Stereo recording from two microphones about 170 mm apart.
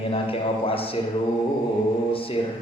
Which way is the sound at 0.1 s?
35° left (ahead or behind).